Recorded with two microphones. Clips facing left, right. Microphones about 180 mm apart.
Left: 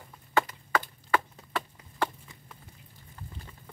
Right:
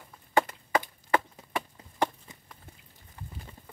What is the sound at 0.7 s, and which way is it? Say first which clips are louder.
Wood: right 2 dB; 20° right (ahead or behind).